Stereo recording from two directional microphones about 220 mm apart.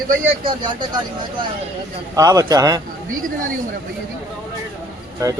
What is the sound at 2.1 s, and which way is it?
Speech, 15° right (ahead or behind).